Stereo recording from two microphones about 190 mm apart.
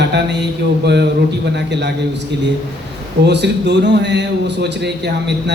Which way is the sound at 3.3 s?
65° right (ahead or behind).